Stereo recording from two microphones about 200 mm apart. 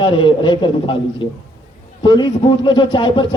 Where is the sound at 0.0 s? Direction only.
25° left (ahead or behind).